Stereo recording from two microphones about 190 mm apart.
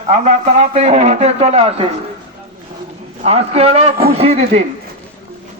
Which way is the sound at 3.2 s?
30° right (ahead or behind).